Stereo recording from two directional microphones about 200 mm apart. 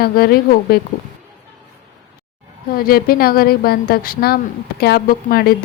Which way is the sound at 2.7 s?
50° left (ahead or behind).